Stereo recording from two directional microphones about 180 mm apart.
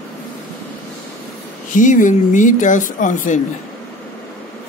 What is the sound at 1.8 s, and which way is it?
Speech, 45° left (ahead or behind).